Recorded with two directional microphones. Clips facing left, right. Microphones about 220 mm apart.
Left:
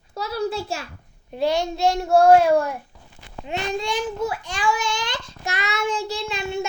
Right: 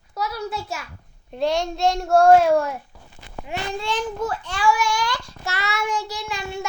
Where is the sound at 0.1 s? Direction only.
30° left (ahead or behind).